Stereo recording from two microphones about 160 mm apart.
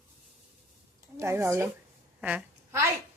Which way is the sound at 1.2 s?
15° right (ahead or behind).